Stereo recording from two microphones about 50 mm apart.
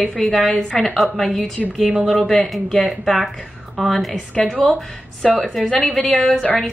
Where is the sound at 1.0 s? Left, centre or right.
Centre.